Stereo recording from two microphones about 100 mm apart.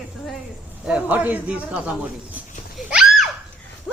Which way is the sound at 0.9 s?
15° right (ahead or behind).